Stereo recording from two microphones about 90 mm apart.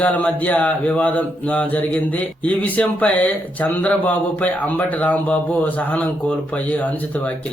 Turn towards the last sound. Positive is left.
turn(degrees=15)  # may be behind; listen again after turning